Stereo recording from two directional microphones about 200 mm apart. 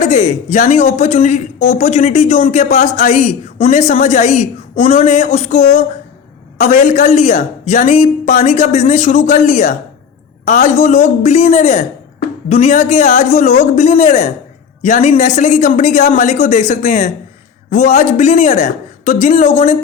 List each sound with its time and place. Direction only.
0.0 s a man's voice: 40° left (ahead or behind)